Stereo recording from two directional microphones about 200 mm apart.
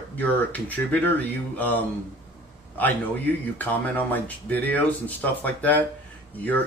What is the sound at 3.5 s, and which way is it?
Speech, 10° left (ahead or behind).